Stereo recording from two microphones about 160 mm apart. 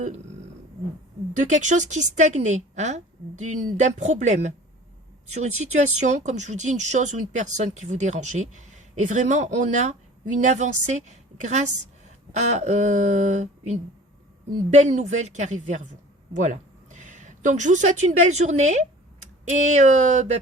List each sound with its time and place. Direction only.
1.5 s a woman's voice: 50° right (ahead or behind)